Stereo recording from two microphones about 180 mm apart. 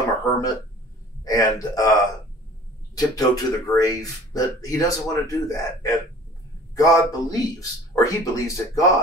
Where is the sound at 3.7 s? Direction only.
20° left (ahead or behind).